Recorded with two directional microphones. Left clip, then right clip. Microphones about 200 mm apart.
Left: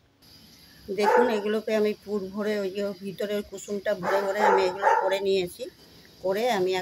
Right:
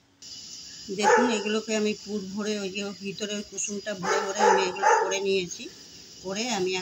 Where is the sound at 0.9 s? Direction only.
60° left (ahead or behind).